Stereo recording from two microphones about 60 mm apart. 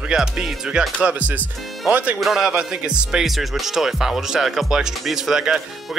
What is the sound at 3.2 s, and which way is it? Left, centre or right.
Speech, centre.